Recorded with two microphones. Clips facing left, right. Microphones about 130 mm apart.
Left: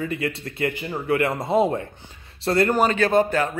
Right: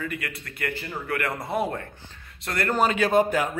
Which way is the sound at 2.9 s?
10° right (ahead or behind).